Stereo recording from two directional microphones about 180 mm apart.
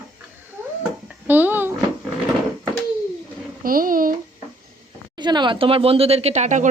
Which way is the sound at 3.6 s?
50° right (ahead or behind).